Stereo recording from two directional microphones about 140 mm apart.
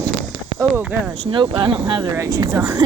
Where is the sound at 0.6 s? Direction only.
15° right (ahead or behind).